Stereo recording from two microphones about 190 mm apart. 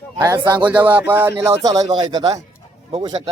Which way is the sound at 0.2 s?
20° right (ahead or behind).